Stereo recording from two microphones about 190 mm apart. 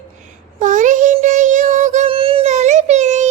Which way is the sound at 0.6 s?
40° right (ahead or behind).